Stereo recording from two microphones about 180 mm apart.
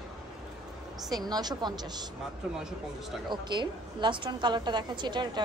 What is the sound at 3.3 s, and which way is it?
A woman's voice, 25° right (ahead or behind).